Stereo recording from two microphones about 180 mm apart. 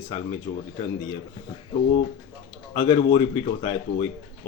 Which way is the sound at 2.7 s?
25° left (ahead or behind).